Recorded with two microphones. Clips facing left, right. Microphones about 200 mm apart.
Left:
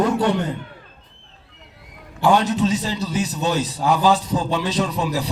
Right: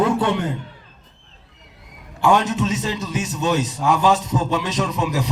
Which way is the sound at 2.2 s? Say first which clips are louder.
Left 1 dB; 35° left (ahead or behind).